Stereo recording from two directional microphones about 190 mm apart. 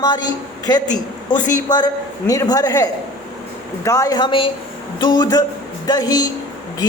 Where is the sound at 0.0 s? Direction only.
20° left (ahead or behind).